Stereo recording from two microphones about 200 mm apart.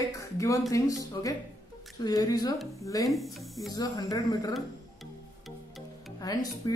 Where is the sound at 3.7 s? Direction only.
20° left (ahead or behind).